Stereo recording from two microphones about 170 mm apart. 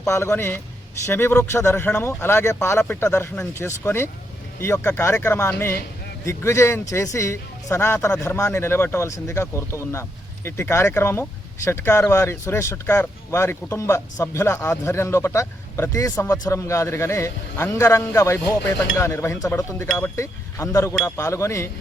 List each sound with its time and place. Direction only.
0.1 s speech: 15° left (ahead or behind)